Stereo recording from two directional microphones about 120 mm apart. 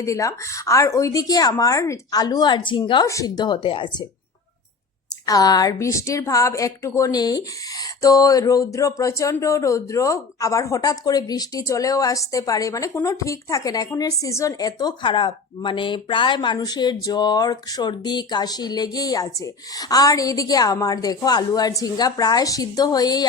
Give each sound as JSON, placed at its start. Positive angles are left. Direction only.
{"t": 0.0, "sound": "speech", "side_deg": 25}
{"t": 3.1, "sound": "speech", "side_deg": 30}
{"t": 5.2, "sound": "a woman's voice", "side_deg": 30}